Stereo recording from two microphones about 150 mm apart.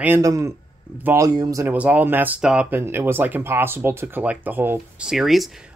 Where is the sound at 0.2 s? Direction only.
20° right (ahead or behind).